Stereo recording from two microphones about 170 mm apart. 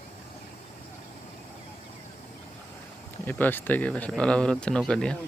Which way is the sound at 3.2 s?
10° left (ahead or behind).